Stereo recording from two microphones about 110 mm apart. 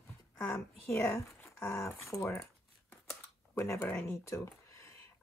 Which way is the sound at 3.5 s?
25° left (ahead or behind).